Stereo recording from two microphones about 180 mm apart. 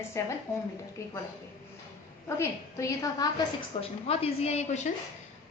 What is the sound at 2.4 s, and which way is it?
Speech, 20° left (ahead or behind).